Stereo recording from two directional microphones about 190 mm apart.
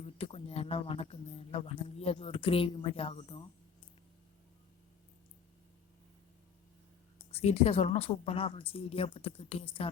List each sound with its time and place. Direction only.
0.2 s speech: 30° left (ahead or behind)
7.2 s a woman's voice: 30° left (ahead or behind)